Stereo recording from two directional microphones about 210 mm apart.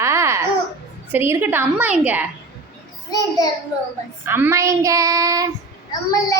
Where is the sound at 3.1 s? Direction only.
20° left (ahead or behind).